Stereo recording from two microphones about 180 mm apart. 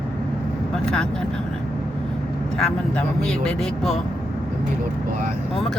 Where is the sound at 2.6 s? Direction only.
5° left (ahead or behind).